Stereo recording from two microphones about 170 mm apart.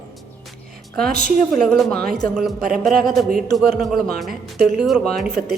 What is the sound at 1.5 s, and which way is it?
A woman's voice, centre (ahead or behind).